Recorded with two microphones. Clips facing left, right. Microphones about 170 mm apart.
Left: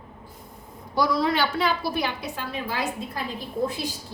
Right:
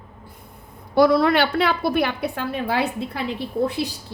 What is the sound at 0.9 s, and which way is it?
A woman's voice, 60° right (ahead or behind).